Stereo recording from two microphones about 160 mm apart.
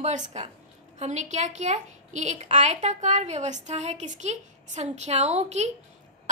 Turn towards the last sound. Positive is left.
turn(degrees=-45)  # may be behind; listen again after turning